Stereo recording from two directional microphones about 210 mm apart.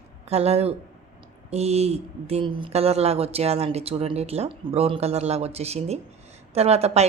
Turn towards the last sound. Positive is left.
turn(degrees=-30)  # may be behind; listen again after turning